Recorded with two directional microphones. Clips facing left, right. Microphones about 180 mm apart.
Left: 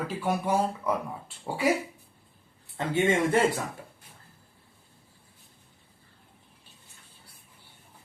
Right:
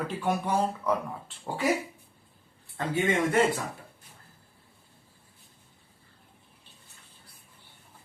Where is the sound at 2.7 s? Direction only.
25° left (ahead or behind).